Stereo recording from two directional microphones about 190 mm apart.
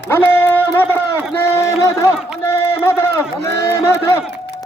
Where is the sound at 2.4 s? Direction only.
15° left (ahead or behind).